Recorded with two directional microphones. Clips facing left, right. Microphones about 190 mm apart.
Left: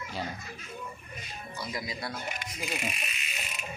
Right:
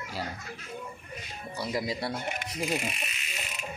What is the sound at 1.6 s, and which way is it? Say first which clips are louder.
Speech: right 6 dB; 30° right (ahead or behind).